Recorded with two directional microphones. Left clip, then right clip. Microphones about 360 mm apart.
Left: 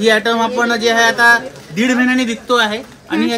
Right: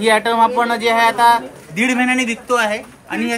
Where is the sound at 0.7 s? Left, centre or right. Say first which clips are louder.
Left 2 dB; right.